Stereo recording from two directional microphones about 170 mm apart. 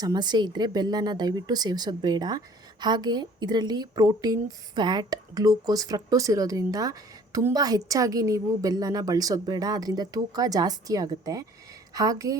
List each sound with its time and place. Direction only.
0.0 s a woman's voice: 25° right (ahead or behind)